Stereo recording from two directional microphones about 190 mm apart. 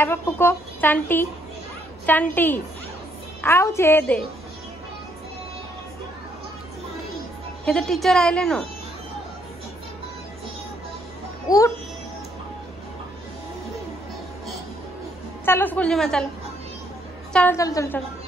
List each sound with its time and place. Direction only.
0.0 s speech: 10° left (ahead or behind)
7.6 s a woman's voice: 5° left (ahead or behind)
11.4 s a child's voice: 20° left (ahead or behind)
15.4 s speech: 10° left (ahead or behind)
17.3 s a woman's voice: 5° left (ahead or behind)
17.6 s speech: 15° left (ahead or behind)